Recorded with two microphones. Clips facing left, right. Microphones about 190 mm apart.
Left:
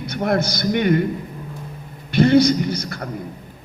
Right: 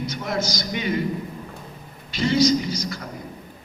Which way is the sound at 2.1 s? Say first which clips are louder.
Left 5 dB; 60° left (ahead or behind).